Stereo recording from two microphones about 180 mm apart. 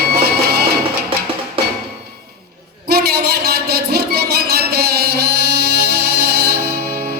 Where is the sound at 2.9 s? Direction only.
60° right (ahead or behind).